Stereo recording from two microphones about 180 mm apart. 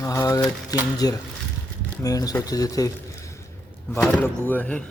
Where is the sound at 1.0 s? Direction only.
20° left (ahead or behind).